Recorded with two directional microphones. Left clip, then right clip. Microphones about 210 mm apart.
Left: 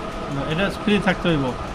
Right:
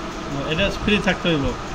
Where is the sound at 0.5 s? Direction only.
25° left (ahead or behind).